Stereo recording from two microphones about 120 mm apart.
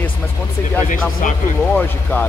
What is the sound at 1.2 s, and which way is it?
Speech, 90° left.